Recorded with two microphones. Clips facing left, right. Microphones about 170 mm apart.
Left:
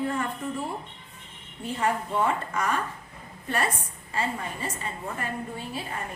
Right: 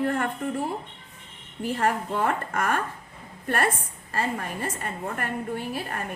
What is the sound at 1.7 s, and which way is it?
A woman's voice, 60° right (ahead or behind).